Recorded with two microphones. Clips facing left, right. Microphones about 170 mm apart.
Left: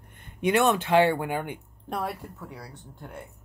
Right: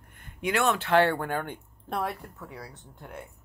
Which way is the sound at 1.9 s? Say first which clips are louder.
Even; centre (ahead or behind).